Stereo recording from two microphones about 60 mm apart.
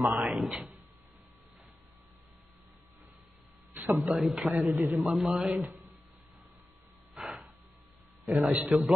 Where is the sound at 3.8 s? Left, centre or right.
Right.